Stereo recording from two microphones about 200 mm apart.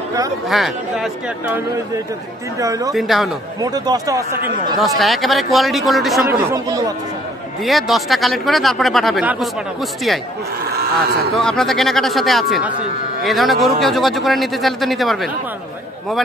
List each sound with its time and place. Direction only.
0.5 s speech: centre (ahead or behind)
2.6 s speech: 15° right (ahead or behind)
2.9 s speech: centre (ahead or behind)
3.6 s speech: 20° right (ahead or behind)
4.7 s speech: centre (ahead or behind)
7.6 s speech: centre (ahead or behind)
10.8 s speech: 50° right (ahead or behind)
11.3 s speech: centre (ahead or behind)